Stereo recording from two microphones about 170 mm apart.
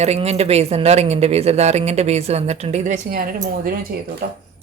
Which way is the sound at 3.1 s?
55° right (ahead or behind).